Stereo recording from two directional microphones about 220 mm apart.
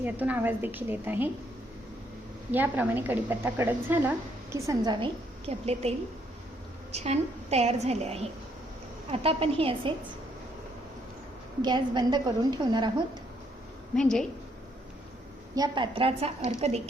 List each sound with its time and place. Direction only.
0.0 s a woman's voice: 5° right (ahead or behind)
2.5 s a woman's voice: 10° right (ahead or behind); by 5.9 s 30° right (ahead or behind)
6.9 s a woman's voice: 30° right (ahead or behind)
11.6 s a woman's voice: 20° right (ahead or behind)
13.9 s a woman's voice: 5° left (ahead or behind)
15.5 s a woman's voice: 20° right (ahead or behind)